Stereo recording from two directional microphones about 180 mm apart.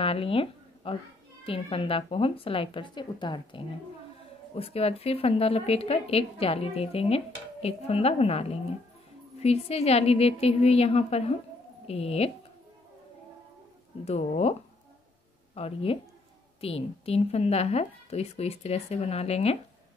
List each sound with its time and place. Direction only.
0.0 s speech: 30° left (ahead or behind)
14.0 s speech: 35° left (ahead or behind)
15.5 s speech: 35° left (ahead or behind)